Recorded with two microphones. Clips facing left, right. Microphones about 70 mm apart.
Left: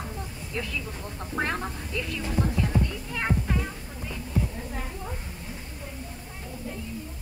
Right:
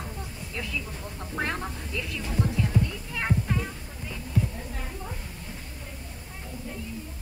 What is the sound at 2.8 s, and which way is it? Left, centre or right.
Music, centre.